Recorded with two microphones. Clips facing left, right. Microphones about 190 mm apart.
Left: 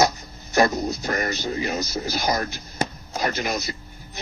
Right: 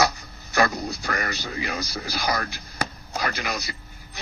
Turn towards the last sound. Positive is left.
turn(degrees=20)  # may be behind; listen again after turning